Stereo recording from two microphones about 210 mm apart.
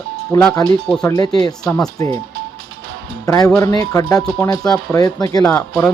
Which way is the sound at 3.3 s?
15° left (ahead or behind).